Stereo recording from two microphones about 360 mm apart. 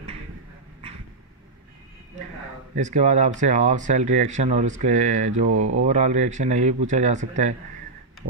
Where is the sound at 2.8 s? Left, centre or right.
Centre.